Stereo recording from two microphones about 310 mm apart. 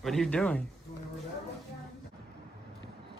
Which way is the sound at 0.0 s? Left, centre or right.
Centre.